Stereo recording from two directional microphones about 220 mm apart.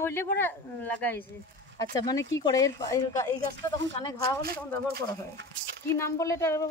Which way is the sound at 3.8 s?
50° right (ahead or behind).